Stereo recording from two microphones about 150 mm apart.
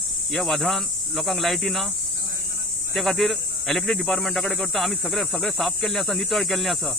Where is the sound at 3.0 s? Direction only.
Centre (ahead or behind).